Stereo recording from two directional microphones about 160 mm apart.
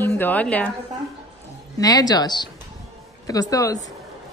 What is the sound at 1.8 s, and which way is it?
A woman's voice, 25° left (ahead or behind).